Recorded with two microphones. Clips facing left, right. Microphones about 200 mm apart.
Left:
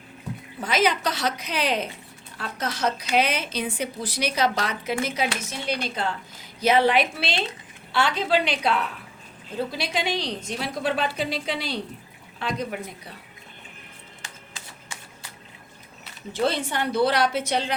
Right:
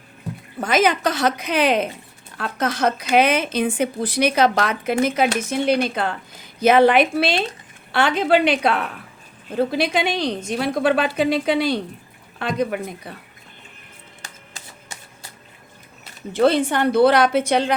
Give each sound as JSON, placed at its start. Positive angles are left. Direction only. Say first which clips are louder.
{"t": 0.6, "sound": "a woman's voice", "louder": "right 5 dB", "side_deg": -50}
{"t": 14.2, "sound": "music", "louder": "right 2 dB", "side_deg": -40}
{"t": 16.3, "sound": "speech", "louder": "right 8 dB", "side_deg": -55}